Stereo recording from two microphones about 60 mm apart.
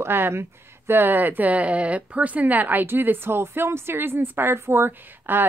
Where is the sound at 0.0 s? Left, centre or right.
Right.